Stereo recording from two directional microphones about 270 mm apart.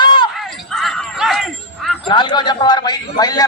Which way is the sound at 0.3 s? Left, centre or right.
Centre.